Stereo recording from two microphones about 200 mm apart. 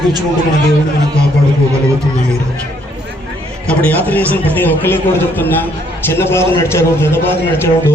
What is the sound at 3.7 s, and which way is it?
A man's voice, 10° left (ahead or behind).